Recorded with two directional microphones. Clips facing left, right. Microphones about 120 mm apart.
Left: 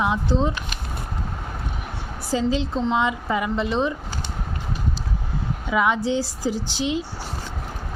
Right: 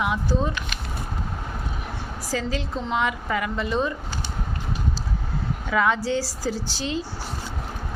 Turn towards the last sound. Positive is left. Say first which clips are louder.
# left 3 dB
turn(degrees=15)  # may be behind; listen again after turning